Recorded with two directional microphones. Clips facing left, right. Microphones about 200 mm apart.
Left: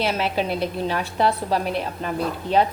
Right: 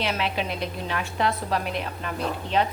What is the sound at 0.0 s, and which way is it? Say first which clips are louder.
A woman's voice: left 4 dB; 40° left (ahead or behind).